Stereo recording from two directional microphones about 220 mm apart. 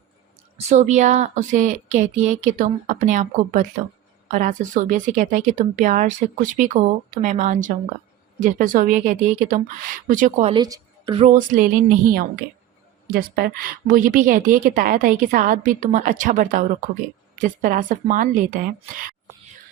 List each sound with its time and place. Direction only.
0.5 s a woman's voice: 30° right (ahead or behind)
10.5 s a woman's voice: 20° right (ahead or behind)
11.3 s a woman's voice: 35° right (ahead or behind)